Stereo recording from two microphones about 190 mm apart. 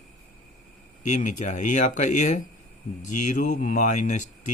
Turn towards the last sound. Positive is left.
turn(degrees=40)  # may be behind; listen again after turning